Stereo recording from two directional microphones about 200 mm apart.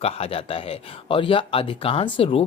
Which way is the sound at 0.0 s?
30° left (ahead or behind).